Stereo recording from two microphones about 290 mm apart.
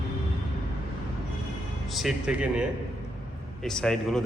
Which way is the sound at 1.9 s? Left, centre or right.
Centre.